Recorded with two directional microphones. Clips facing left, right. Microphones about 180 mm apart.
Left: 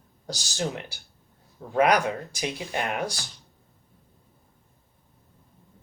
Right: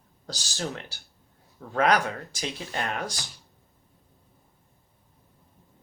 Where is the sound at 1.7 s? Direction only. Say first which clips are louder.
Left 2 dB; 15° left (ahead or behind).